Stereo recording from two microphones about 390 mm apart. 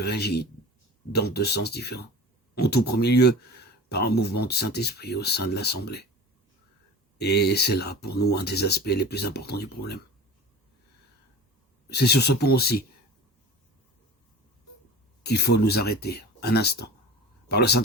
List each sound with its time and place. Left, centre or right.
0.0 s speech: left
7.2 s speech: left
11.9 s speech: left
15.2 s speech: left